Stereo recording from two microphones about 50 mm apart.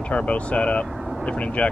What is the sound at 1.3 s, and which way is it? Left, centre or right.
Speech, left.